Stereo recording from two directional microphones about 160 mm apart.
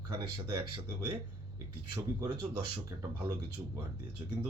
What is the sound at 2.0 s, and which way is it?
Speech, 25° right (ahead or behind).